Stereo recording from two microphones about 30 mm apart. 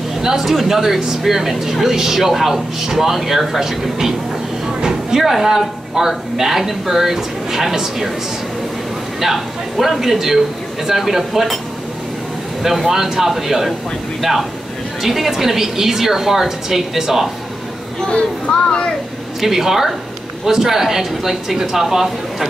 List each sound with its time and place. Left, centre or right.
0.2 s speech: centre
0.5 s speech: centre
0.7 s speech: centre
9.2 s speech: centre
12.6 s speech: centre
15.0 s speech: centre
18.1 s speech: left
19.4 s speech: centre